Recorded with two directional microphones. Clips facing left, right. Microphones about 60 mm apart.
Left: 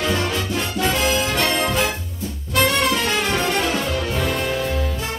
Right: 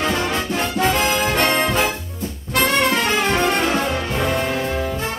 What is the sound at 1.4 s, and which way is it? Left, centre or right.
Music, right.